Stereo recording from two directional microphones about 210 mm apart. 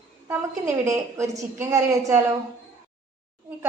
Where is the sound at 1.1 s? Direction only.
15° right (ahead or behind).